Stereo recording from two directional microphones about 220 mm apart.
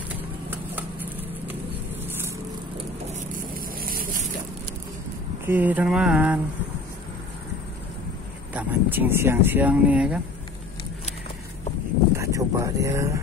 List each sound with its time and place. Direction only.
3.1 s vehicle: 35° right (ahead or behind)
4.0 s boat: 40° right (ahead or behind)
5.5 s speech: 5° right (ahead or behind)
8.5 s speech: 10° right (ahead or behind)
12.2 s a sound: 15° right (ahead or behind)